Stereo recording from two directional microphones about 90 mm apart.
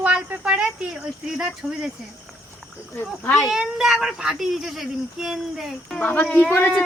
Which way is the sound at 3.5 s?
5° right (ahead or behind).